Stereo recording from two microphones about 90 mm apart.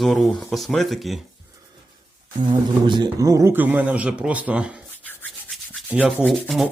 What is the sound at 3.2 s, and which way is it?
Speech, 35° right (ahead or behind).